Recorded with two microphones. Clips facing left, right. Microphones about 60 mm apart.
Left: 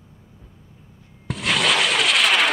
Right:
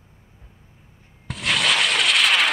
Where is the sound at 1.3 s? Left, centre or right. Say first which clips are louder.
Left 1 dB; centre.